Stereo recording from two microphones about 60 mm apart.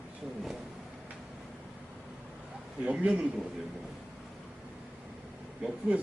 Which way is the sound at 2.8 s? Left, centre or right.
Centre.